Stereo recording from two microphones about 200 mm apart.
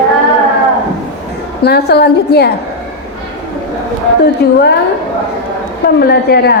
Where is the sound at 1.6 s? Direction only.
55° left (ahead or behind).